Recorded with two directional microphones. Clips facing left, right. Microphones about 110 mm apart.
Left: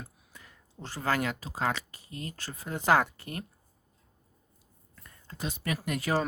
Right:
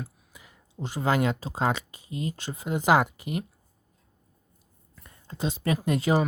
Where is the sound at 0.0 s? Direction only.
10° right (ahead or behind).